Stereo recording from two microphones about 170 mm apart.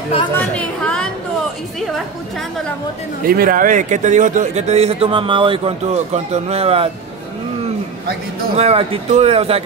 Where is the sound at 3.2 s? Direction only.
60° right (ahead or behind); by 6.9 s 35° right (ahead or behind).